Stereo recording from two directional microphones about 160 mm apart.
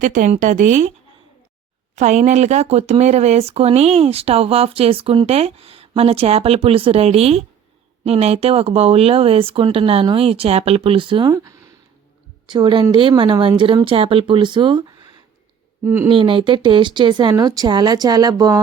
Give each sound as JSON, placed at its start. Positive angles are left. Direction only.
{"t": 0.0, "sound": "speech", "side_deg": -55}
{"t": 2.0, "sound": "speech", "side_deg": -45}
{"t": 15.8, "sound": "speech", "side_deg": -15}
{"t": 16.0, "sound": "speech", "side_deg": -30}